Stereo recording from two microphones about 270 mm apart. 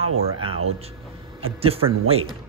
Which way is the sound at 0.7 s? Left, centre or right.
Right.